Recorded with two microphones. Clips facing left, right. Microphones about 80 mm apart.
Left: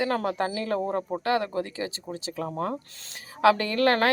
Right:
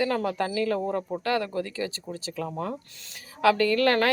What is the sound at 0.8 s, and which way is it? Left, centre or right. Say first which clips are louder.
Speech: left 1 dB; left.